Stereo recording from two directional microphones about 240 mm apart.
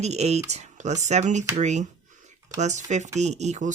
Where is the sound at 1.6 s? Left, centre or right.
Right.